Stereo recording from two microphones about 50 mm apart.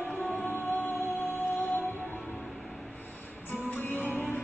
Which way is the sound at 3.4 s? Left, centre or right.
Left.